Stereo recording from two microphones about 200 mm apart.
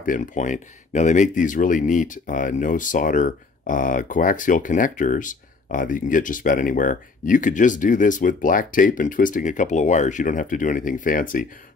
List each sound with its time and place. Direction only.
0.0 s speech: 40° left (ahead or behind)